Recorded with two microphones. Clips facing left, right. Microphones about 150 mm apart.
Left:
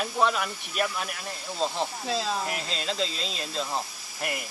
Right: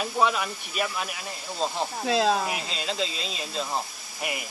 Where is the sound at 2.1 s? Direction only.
65° right (ahead or behind).